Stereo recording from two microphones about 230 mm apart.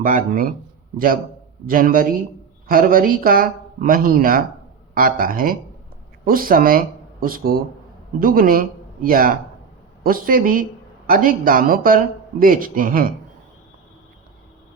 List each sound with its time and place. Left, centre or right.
0.0 s speech: right